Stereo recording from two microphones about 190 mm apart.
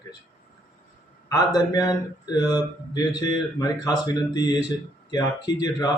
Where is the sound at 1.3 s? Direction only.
20° left (ahead or behind).